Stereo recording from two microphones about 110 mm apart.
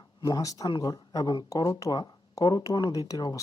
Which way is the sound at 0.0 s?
40° left (ahead or behind).